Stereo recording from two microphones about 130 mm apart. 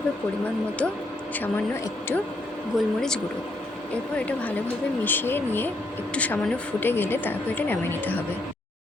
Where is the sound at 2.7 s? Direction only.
Centre (ahead or behind).